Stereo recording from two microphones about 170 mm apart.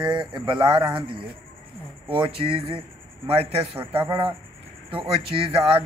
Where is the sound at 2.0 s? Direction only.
30° right (ahead or behind).